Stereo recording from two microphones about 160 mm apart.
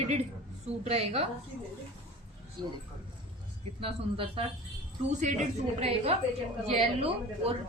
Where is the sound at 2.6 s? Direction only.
30° right (ahead or behind).